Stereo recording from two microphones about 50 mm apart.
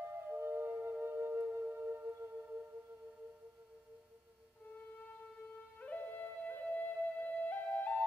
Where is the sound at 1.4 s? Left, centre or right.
Right.